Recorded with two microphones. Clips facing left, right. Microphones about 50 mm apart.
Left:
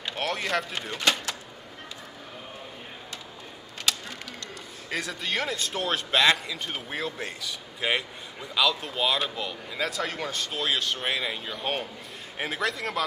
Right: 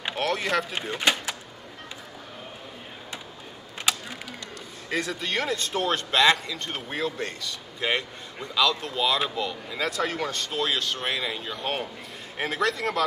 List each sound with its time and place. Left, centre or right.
0.1 s a man's voice: centre
0.9 s speech: centre
3.9 s a sound: centre
4.8 s a man's voice: centre